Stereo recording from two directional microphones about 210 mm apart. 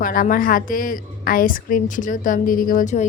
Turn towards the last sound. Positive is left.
turn(degrees=40)  # may be behind; listen again after turning